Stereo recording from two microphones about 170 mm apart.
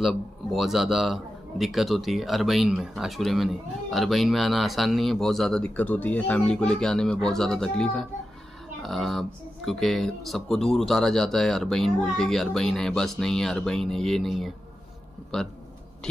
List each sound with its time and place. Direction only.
0.0 s a man's voice: centre (ahead or behind)